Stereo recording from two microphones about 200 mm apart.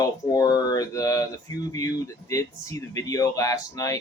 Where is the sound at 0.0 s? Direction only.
20° left (ahead or behind).